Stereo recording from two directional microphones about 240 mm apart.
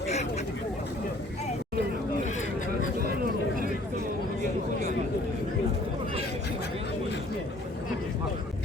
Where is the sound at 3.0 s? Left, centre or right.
Right.